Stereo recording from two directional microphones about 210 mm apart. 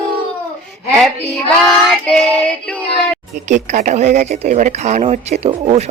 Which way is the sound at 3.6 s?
35° right (ahead or behind).